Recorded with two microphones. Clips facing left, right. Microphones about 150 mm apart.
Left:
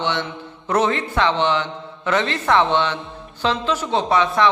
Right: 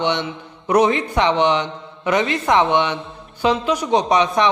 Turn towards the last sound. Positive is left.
turn(degrees=-20)  # may be behind; listen again after turning